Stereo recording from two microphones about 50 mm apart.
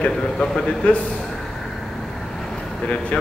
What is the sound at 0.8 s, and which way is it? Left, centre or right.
Speech, left.